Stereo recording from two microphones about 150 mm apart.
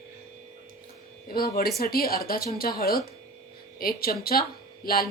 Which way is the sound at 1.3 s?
90° left.